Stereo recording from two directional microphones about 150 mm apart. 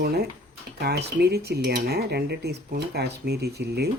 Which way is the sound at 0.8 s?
90° right.